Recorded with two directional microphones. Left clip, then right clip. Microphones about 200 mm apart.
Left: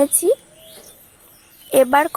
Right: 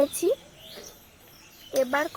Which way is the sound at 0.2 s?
35° left (ahead or behind).